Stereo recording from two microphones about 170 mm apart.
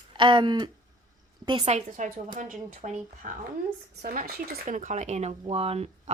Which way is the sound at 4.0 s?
65° right (ahead or behind).